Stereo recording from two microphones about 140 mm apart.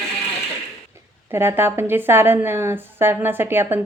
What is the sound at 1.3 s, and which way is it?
A woman's voice, 15° right (ahead or behind).